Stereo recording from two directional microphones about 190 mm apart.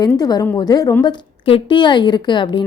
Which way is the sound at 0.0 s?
20° left (ahead or behind).